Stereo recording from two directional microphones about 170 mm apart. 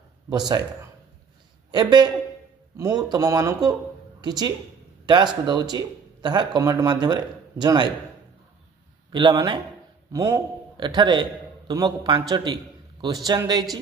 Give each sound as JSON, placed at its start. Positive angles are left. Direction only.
{"t": 0.3, "sound": "speech", "side_deg": -25}
{"t": 1.7, "sound": "a woman's voice", "side_deg": -25}
{"t": 9.1, "sound": "speech", "side_deg": -25}